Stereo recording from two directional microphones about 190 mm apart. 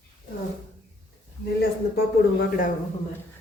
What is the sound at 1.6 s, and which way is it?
Speech, 60° left (ahead or behind).